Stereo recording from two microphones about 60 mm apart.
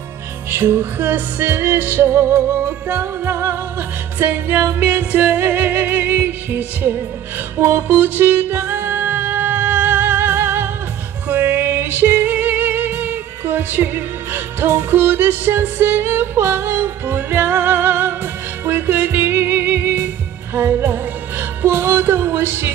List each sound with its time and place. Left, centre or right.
0.5 s music: right